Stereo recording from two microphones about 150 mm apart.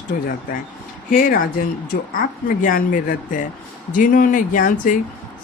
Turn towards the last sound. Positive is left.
turn(degrees=65)  # may be behind; listen again after turning